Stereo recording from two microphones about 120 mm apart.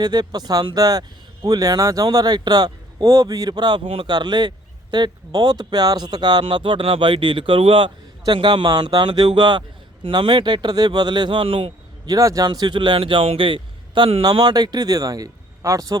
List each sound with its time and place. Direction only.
0.0 s speech: 35° right (ahead or behind)
12.0 s speech: 30° right (ahead or behind)